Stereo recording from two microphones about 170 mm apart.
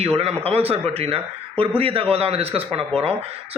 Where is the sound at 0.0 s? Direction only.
35° right (ahead or behind).